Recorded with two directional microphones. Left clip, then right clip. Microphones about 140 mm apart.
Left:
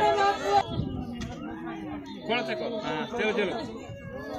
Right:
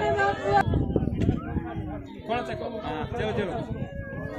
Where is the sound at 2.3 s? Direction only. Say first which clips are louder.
Left 1 dB; 25° right (ahead or behind).